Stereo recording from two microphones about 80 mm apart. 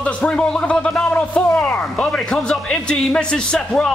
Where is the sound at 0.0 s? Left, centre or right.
Centre.